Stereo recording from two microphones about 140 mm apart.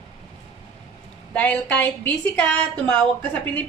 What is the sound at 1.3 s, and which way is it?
A woman's voice, 10° left (ahead or behind).